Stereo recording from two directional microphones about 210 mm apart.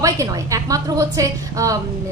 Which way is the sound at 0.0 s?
15° right (ahead or behind).